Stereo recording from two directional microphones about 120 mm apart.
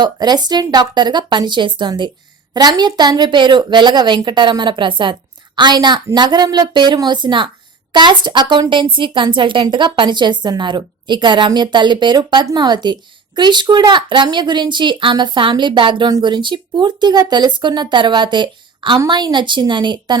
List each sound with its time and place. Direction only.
0.0 s a woman's voice: 35° right (ahead or behind)